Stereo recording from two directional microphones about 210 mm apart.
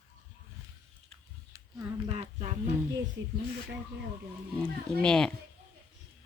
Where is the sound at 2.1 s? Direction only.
30° right (ahead or behind).